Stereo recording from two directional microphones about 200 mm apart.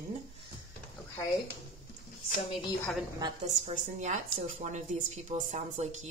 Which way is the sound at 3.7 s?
40° right (ahead or behind).